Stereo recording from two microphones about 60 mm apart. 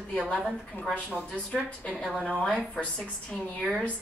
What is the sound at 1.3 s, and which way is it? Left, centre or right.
Speech, centre.